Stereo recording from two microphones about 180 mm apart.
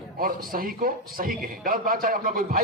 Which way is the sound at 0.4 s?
55° right (ahead or behind).